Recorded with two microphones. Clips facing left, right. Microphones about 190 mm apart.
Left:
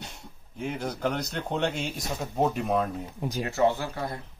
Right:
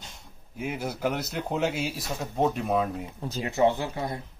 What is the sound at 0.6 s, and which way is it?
Speech, 5° right (ahead or behind).